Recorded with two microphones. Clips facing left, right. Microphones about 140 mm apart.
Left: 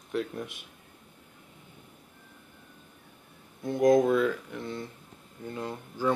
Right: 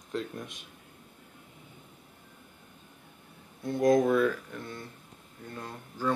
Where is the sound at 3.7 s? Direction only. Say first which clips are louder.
Left 2 dB; 20° left (ahead or behind).